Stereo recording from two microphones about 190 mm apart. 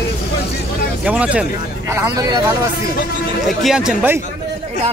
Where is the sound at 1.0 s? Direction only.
5° right (ahead or behind).